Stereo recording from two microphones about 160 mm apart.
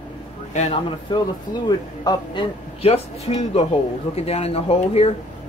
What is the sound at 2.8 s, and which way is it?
Speech, 40° left (ahead or behind).